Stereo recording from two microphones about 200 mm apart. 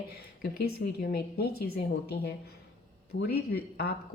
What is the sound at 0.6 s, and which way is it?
A woman's voice, 50° left (ahead or behind).